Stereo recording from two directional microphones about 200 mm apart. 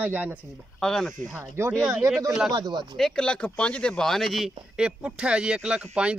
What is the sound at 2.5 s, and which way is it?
Speech, 20° right (ahead or behind).